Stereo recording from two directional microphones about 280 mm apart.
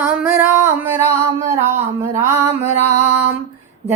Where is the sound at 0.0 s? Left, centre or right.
Centre.